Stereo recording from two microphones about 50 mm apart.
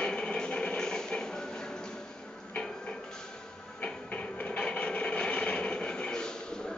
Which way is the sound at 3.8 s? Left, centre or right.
Left.